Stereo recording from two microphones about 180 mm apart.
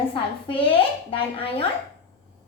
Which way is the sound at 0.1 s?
30° left (ahead or behind).